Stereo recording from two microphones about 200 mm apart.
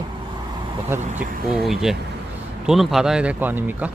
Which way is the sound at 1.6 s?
Centre (ahead or behind).